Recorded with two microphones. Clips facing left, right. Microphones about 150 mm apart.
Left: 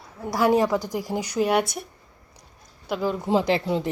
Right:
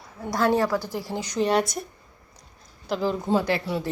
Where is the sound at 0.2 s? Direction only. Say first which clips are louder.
Left 1 dB; 5° left (ahead or behind).